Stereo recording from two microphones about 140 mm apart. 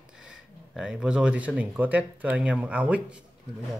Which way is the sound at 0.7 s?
5° right (ahead or behind).